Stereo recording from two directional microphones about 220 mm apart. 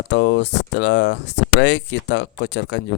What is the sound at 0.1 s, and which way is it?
A man's voice, 55° left (ahead or behind).